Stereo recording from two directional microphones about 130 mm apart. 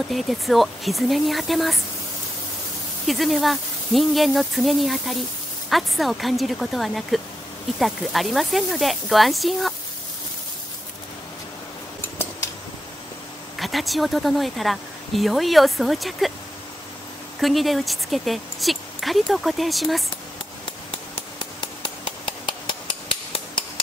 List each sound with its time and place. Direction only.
0.1 s speech: centre (ahead or behind)
3.1 s speech: centre (ahead or behind)
12.0 s scissors: 15° left (ahead or behind)
13.6 s speech: centre (ahead or behind)
17.4 s speech: centre (ahead or behind)
21.8 s hammer: 45° left (ahead or behind)